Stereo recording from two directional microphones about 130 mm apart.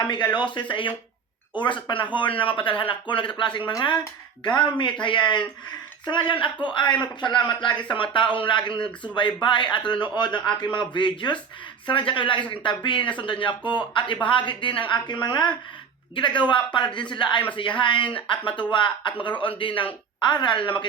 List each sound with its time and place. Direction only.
0.0 s a man's voice: 35° left (ahead or behind)